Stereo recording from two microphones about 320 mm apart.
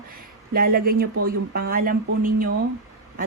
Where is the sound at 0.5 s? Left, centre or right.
Right.